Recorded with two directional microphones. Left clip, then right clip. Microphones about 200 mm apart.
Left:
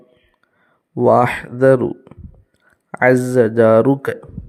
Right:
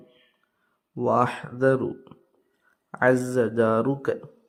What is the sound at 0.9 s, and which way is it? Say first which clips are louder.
Speech: left 10 dB; 30° left (ahead or behind).